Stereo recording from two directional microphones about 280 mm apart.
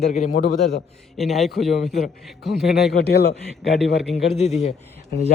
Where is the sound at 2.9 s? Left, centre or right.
Left.